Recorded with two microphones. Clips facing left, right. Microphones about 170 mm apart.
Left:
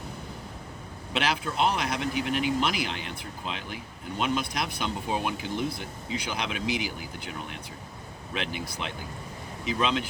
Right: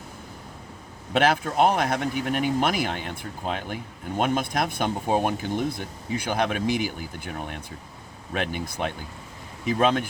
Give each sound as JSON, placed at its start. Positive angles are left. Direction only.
{"t": 1.1, "sound": "speech", "side_deg": -50}